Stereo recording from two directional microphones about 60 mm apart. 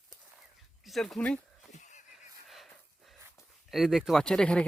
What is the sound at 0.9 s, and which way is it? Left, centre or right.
Speech, centre.